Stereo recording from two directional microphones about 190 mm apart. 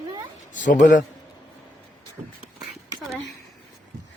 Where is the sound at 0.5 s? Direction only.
45° left (ahead or behind).